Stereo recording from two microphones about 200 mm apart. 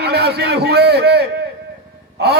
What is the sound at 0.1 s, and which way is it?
A man's voice, 55° right (ahead or behind).